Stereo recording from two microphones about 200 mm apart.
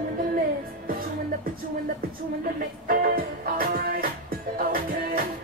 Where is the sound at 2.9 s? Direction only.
45° right (ahead or behind).